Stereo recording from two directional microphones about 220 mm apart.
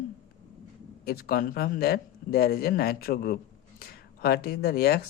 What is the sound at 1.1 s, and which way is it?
Speech, 40° left (ahead or behind).